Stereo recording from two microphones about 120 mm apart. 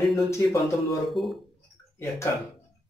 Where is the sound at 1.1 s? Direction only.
Centre (ahead or behind).